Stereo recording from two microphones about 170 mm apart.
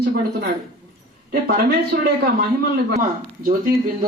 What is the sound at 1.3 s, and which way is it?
Speech, 65° right (ahead or behind).